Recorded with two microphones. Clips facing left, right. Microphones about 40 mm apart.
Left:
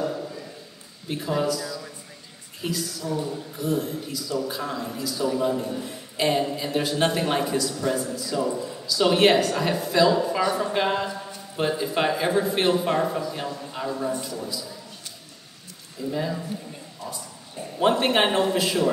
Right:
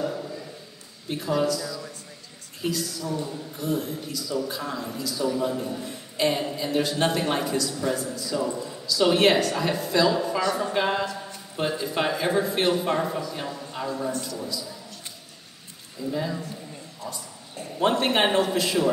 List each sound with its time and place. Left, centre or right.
0.0 s a sound: centre
1.0 s a woman's voice: centre
14.1 s a man's voice: centre
14.4 s a man's voice: centre
16.0 s a man's voice: centre
17.0 s a sound: centre
17.7 s a man's voice: centre